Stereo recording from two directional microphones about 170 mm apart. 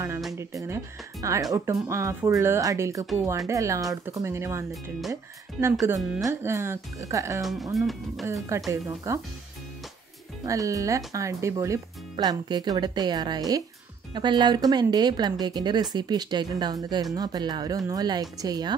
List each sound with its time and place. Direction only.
0.4 s speech: 15° right (ahead or behind)
7.7 s music: centre (ahead or behind)
8.3 s speech: 20° right (ahead or behind)
10.4 s speech: 20° right (ahead or behind)